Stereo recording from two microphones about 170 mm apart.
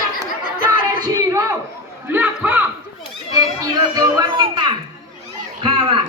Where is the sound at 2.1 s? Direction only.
10° right (ahead or behind).